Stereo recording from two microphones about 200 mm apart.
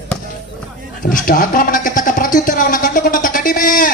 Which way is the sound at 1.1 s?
45° left (ahead or behind).